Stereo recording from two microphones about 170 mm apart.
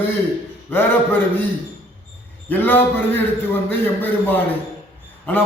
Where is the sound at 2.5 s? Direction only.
10° left (ahead or behind).